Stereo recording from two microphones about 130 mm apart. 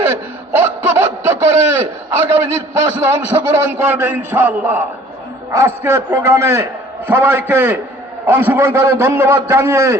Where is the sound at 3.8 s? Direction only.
20° right (ahead or behind).